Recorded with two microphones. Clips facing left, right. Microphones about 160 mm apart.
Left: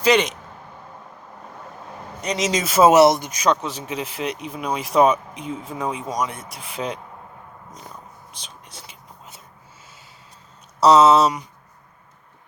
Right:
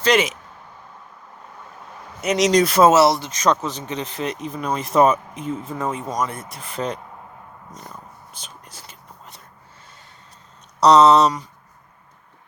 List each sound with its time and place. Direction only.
0.1 s speech: centre (ahead or behind)
2.2 s speech: centre (ahead or behind)
2.9 s speech: 20° left (ahead or behind)
3.5 s speech: centre (ahead or behind)
10.8 s speech: 5° left (ahead or behind)